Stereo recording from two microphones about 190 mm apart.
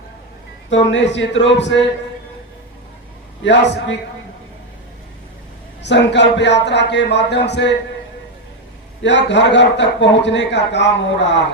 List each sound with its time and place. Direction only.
0.7 s a man's voice: 75° left (ahead or behind)
3.4 s a man's voice: 65° left (ahead or behind)
5.8 s speech: 65° left (ahead or behind)
9.0 s a man's voice: 65° left (ahead or behind)